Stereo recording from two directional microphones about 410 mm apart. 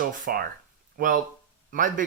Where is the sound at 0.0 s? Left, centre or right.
Centre.